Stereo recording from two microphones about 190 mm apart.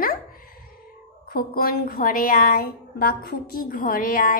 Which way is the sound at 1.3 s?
50° left (ahead or behind).